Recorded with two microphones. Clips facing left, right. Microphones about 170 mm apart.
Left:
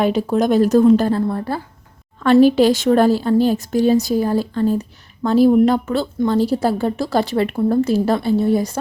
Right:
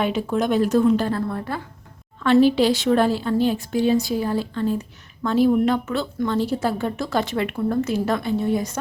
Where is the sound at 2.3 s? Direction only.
45° left (ahead or behind).